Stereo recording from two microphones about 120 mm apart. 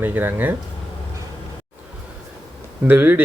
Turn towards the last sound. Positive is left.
turn(degrees=-15)  # may be behind; listen again after turning